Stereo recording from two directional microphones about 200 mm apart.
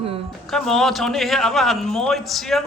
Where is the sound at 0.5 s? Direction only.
Centre (ahead or behind).